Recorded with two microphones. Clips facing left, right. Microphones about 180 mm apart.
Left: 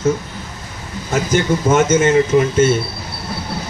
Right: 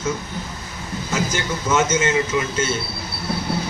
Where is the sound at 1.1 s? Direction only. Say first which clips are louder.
Left 8 dB; 55° left (ahead or behind).